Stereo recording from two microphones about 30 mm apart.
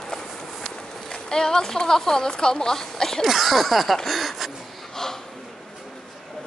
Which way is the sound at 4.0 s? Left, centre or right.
Centre.